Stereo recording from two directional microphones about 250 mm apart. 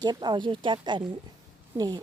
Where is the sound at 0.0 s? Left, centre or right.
Centre.